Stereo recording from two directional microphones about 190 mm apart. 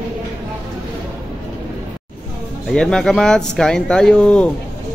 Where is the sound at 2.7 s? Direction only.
5° left (ahead or behind).